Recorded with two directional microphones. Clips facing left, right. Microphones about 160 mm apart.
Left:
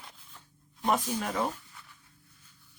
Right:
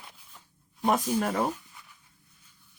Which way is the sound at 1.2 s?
50° right (ahead or behind).